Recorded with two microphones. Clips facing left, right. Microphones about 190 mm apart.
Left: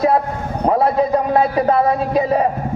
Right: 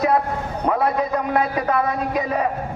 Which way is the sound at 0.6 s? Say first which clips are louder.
Left 5 dB; 30° left (ahead or behind).